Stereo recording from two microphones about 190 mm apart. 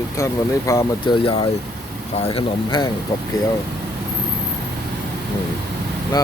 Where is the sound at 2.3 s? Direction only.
25° left (ahead or behind).